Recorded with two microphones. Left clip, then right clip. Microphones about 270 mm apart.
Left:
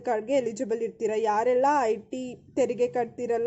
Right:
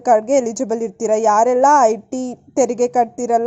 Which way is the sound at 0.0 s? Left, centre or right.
Centre.